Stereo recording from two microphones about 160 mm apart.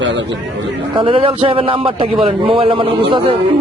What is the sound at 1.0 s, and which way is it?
A man's voice, 35° right (ahead or behind).